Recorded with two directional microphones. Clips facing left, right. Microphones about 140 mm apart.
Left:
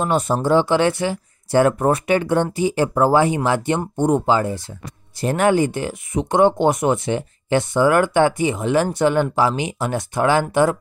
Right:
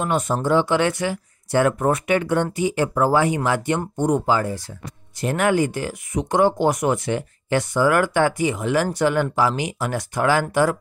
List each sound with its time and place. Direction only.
0.0 s speech: 30° left (ahead or behind)